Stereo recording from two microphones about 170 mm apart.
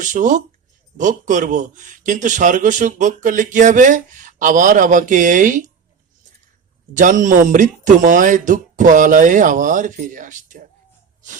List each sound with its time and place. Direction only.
0.0 s a man's voice: 50° right (ahead or behind)
6.9 s a man's voice: 50° right (ahead or behind)